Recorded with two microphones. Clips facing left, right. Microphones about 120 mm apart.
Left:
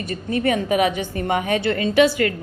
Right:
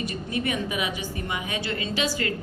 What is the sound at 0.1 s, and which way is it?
A woman's voice, 50° left (ahead or behind).